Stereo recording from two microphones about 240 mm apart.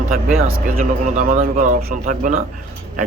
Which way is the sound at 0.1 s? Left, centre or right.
Right.